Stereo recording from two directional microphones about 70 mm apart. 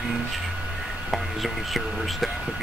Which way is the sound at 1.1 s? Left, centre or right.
Centre.